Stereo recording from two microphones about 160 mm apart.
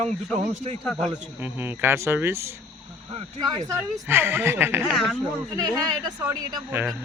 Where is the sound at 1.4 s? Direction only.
15° right (ahead or behind).